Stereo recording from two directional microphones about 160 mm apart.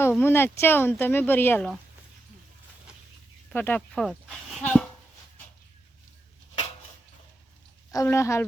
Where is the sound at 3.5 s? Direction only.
10° left (ahead or behind).